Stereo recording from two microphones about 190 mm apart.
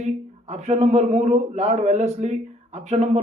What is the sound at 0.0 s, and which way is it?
A man's voice, 35° right (ahead or behind).